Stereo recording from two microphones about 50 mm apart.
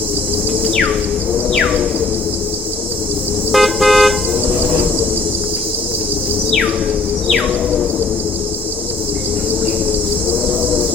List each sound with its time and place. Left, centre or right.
3.5 s car: centre